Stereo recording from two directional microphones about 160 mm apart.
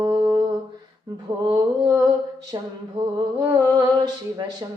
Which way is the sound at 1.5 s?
25° right (ahead or behind).